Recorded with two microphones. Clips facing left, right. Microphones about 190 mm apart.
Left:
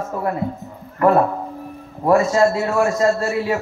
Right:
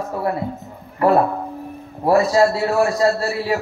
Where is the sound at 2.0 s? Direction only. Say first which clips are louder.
Even; 35° right (ahead or behind).